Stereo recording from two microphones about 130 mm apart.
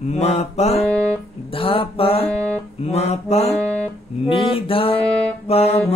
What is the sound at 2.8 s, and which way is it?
Mantra, 55° left (ahead or behind).